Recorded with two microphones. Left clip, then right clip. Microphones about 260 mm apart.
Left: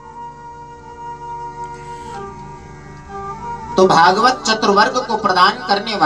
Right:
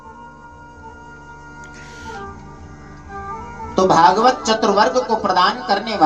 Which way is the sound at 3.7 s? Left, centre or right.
Left.